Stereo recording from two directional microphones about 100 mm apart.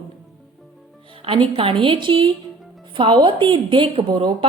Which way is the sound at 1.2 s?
65° right (ahead or behind).